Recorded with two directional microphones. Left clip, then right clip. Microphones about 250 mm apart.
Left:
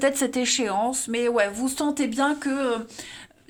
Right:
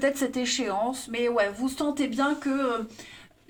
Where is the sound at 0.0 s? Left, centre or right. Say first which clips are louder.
Left 3 dB; left.